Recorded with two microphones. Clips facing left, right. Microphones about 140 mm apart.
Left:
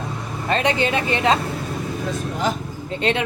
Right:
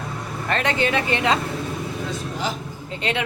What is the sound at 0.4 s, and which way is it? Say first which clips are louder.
Speech: left 2 dB; 20° left (ahead or behind).